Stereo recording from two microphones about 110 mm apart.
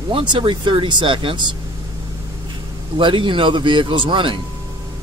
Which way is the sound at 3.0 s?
50° right (ahead or behind).